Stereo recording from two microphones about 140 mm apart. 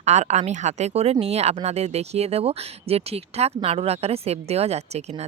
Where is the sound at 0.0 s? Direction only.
55° right (ahead or behind).